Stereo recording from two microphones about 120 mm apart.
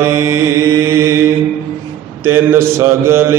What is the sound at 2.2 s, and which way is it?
Mantra, 20° right (ahead or behind).